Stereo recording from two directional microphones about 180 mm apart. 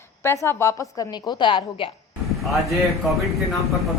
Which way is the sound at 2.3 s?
Centre (ahead or behind).